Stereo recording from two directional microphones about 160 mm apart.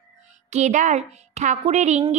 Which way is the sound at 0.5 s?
45° right (ahead or behind).